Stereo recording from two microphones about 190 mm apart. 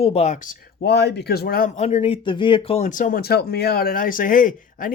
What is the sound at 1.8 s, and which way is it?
Speech, 35° left (ahead or behind).